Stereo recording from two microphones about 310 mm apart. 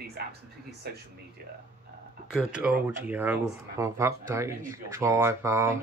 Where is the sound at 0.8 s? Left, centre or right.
Right.